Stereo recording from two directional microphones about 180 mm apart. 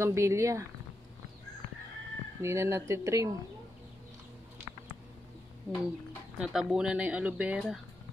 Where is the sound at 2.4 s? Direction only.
15° right (ahead or behind).